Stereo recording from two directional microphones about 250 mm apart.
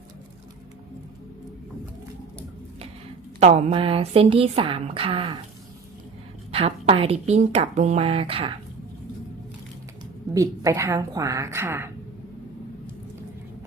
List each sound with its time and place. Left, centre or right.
3.4 s speech: right
6.5 s speech: right
10.3 s a woman's voice: centre